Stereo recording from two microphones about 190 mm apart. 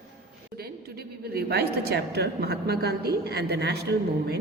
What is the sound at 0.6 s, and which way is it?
A woman's voice, 55° right (ahead or behind).